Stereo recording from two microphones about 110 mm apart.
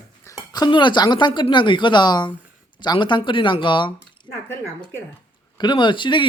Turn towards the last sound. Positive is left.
turn(degrees=45)  # may be behind; listen again after turning